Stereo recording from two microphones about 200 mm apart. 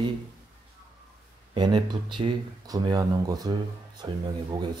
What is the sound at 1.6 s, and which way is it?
Speech, 20° right (ahead or behind).